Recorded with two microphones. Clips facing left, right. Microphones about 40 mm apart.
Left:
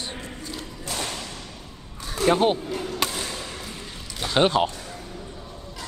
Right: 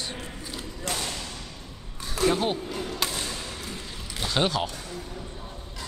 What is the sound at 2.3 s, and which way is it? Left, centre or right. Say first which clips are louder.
Speech: left 6 dB; left.